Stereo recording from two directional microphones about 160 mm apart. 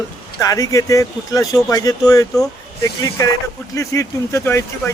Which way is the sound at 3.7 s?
20° left (ahead or behind).